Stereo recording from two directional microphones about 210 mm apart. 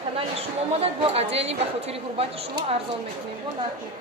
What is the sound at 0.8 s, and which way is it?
Speech, 25° right (ahead or behind).